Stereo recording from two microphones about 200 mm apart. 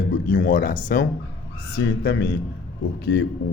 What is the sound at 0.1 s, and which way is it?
Speech, 45° left (ahead or behind).